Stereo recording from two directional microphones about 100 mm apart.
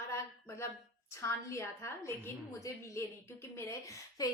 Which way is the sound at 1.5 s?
30° left (ahead or behind).